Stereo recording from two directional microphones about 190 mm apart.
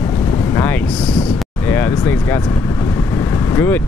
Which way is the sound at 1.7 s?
10° left (ahead or behind).